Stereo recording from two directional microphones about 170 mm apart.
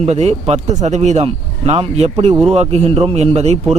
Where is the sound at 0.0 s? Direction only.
40° right (ahead or behind).